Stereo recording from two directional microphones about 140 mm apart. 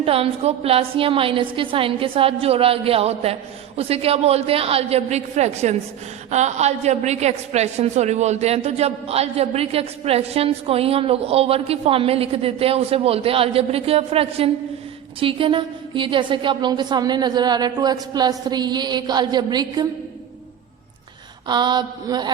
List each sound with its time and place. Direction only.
0.0 s a woman's voice: 45° right (ahead or behind)
21.4 s a woman's voice: 30° right (ahead or behind)